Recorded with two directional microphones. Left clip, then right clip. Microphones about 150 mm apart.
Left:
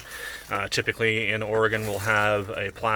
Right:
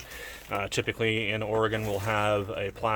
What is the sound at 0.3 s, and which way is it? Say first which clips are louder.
Speech: left 4 dB; 10° left (ahead or behind).